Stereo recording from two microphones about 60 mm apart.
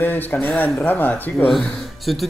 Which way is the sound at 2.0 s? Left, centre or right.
Centre.